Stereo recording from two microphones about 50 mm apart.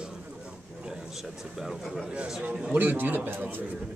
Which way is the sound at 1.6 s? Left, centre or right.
Centre.